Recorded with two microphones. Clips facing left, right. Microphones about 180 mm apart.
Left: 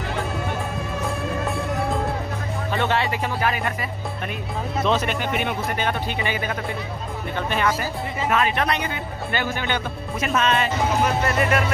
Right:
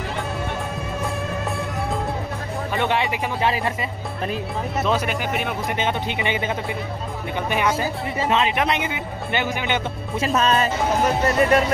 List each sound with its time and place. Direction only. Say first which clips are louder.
2.7 s music: even; 15° right (ahead or behind)
3.4 s speech: right 3 dB; 30° right (ahead or behind)
4.8 s speech: left 1 dB; 10° right (ahead or behind)
5.8 s speech: right 1 dB; 20° right (ahead or behind)
10.2 s speech: right 2 dB; 35° right (ahead or behind)